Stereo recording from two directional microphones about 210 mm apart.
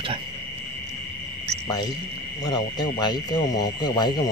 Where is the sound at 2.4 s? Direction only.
20° left (ahead or behind).